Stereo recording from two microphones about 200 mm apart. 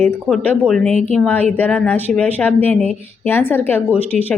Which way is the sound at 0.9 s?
35° right (ahead or behind).